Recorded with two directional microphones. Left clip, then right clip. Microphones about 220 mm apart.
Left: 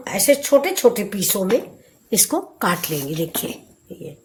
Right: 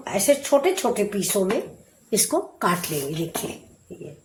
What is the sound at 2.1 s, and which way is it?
Speech, 35° left (ahead or behind).